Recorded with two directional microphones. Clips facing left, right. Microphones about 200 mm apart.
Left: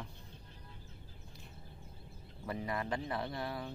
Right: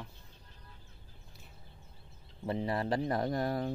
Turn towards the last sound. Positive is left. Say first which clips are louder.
# right 8 dB
turn(degrees=-45)  # may be behind; listen again after turning